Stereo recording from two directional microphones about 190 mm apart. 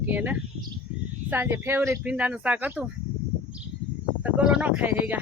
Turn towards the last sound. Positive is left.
turn(degrees=-10)  # may be behind; listen again after turning